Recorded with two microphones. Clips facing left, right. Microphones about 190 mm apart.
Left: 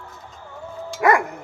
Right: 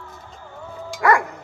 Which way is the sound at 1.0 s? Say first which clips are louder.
Left 1 dB; 20° left (ahead or behind).